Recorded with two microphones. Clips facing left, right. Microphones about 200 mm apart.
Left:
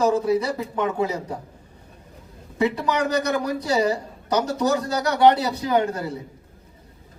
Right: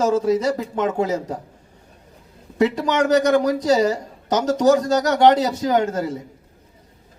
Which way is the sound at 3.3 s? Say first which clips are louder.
Right 6 dB; 45° right (ahead or behind).